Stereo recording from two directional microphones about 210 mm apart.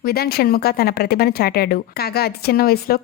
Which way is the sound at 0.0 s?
45° left (ahead or behind).